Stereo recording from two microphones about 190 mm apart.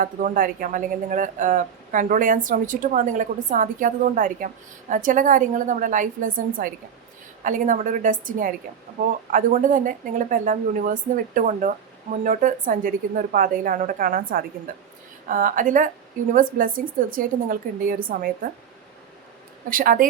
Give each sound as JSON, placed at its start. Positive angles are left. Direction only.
{"t": 0.0, "sound": "speech", "side_deg": -45}
{"t": 19.7, "sound": "speech", "side_deg": -45}